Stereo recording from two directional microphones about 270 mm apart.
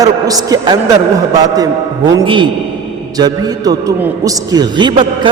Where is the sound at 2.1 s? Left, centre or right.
Centre.